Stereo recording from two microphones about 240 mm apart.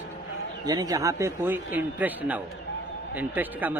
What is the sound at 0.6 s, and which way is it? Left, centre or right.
A man's voice, centre.